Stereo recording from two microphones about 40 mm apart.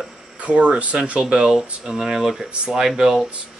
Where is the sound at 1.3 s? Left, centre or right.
Centre.